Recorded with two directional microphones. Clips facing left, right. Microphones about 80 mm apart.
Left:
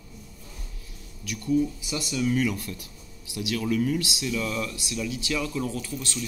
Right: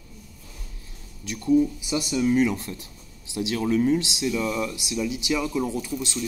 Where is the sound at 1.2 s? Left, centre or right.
Right.